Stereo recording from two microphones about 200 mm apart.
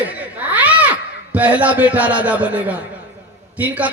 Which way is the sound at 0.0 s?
10° right (ahead or behind).